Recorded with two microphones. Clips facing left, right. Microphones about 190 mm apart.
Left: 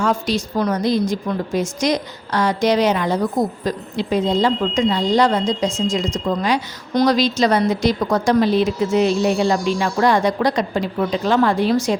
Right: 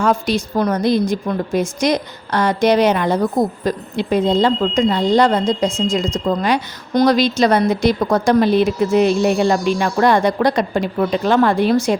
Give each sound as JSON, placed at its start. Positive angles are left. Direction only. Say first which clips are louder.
{"t": 0.0, "sound": "speech", "louder": "right 2 dB", "side_deg": -55}